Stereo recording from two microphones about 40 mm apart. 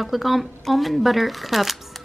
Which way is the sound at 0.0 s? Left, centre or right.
Centre.